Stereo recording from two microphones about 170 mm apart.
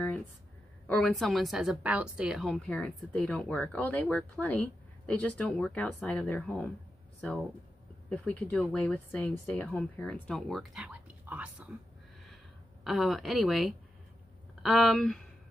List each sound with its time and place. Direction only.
0.8 s a woman's voice: 5° left (ahead or behind)
12.8 s speech: centre (ahead or behind)